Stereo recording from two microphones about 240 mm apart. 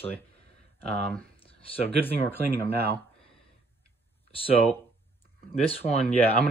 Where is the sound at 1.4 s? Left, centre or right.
Left.